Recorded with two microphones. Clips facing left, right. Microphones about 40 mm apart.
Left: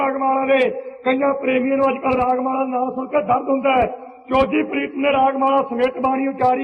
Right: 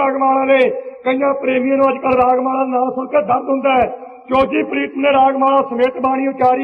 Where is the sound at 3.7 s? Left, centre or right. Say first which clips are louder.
Right 3 dB; centre.